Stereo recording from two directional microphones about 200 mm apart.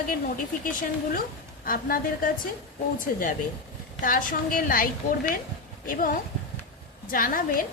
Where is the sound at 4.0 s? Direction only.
40° left (ahead or behind).